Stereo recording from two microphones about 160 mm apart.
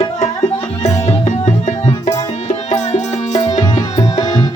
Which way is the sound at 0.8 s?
45° left (ahead or behind).